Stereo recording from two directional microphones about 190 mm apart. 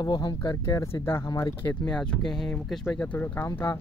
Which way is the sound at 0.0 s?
20° left (ahead or behind).